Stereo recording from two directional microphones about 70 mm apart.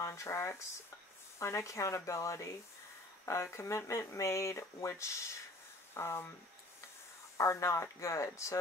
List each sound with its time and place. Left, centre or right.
0.0 s speech: left
7.3 s speech: left